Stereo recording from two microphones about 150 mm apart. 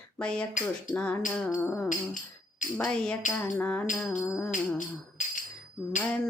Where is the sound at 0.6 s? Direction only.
60° left (ahead or behind).